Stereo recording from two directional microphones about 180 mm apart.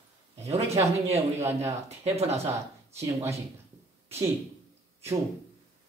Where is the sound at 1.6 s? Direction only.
35° right (ahead or behind).